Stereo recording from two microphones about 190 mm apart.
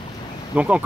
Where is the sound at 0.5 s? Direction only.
5° right (ahead or behind).